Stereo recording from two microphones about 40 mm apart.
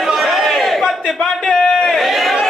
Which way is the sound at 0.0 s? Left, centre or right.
Centre.